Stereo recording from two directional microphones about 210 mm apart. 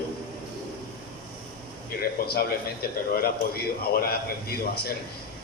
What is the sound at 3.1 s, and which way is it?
Speech, 45° left (ahead or behind).